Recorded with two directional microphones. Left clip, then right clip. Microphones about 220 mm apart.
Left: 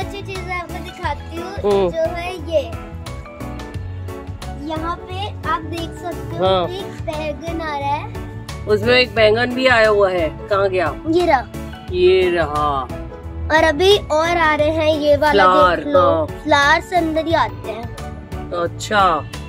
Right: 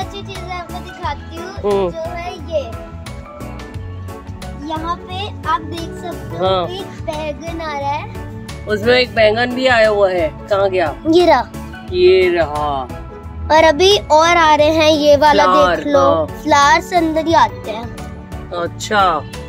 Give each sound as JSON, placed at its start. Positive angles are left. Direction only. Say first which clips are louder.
{"t": 1.6, "sound": "a child's voice", "louder": "even", "side_deg": 5}
{"t": 1.9, "sound": "music", "louder": "left 3 dB", "side_deg": 40}
{"t": 4.6, "sound": "music", "louder": "right 2 dB", "side_deg": 0}
{"t": 6.3, "sound": "speech", "louder": "right 1 dB", "side_deg": 5}
{"t": 8.6, "sound": "speech", "louder": "right 1 dB", "side_deg": 0}
{"t": 11.1, "sound": "a child's voice", "louder": "right 5 dB", "side_deg": -30}
{"t": 11.9, "sound": "speech", "louder": "right 3 dB", "side_deg": 0}
{"t": 13.5, "sound": "a child's voice", "louder": "right 3 dB", "side_deg": -20}
{"t": 15.3, "sound": "speech", "louder": "right 1 dB", "side_deg": 0}
{"t": 16.4, "sound": "a child's voice", "louder": "right 3 dB", "side_deg": -30}
{"t": 18.5, "sound": "speech", "louder": "right 1 dB", "side_deg": 0}